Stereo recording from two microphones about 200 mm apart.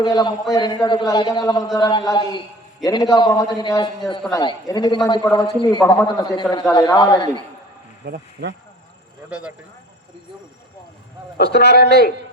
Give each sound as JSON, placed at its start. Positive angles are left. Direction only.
{"t": 0.0, "sound": "a man's voice", "side_deg": 20}
{"t": 8.0, "sound": "speech", "side_deg": -55}
{"t": 11.3, "sound": "a man's voice", "side_deg": 55}